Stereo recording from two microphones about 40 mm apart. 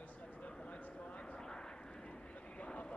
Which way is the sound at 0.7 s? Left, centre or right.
Left.